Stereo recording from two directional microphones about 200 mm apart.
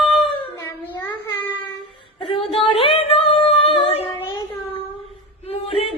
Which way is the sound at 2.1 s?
25° left (ahead or behind).